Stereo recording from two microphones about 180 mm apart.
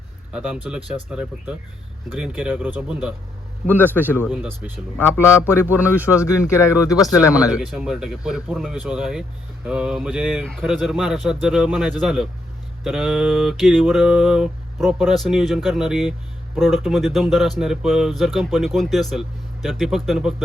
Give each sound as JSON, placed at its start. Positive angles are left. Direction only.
{"t": 0.3, "sound": "a sound", "side_deg": -5}
{"t": 1.1, "sound": "speech", "side_deg": -5}
{"t": 5.0, "sound": "speech", "side_deg": 15}
{"t": 5.6, "sound": "speech", "side_deg": -10}
{"t": 6.2, "sound": "speech", "side_deg": 15}
{"t": 7.5, "sound": "a sound", "side_deg": -5}